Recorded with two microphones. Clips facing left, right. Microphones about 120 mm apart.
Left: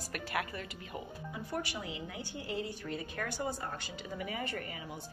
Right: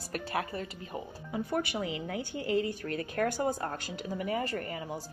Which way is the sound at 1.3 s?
60° right (ahead or behind).